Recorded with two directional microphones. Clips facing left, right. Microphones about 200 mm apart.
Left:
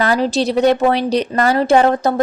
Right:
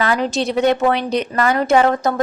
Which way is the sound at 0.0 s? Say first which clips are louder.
Left 3 dB; 35° left (ahead or behind).